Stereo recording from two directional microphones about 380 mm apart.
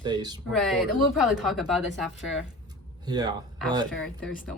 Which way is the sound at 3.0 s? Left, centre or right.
Centre.